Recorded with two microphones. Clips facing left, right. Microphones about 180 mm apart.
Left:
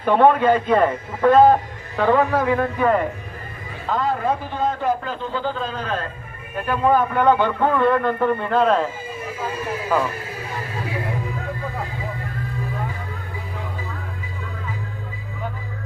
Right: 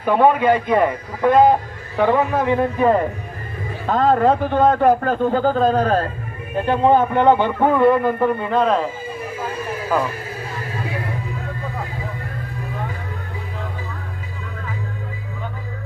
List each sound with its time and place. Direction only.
0.0 s a man's voice: 10° right (ahead or behind)
3.8 s a man's voice: 60° right (ahead or behind); by 6.1 s 40° right (ahead or behind)
6.6 s a man's voice: 25° right (ahead or behind); by 8.9 s centre (ahead or behind)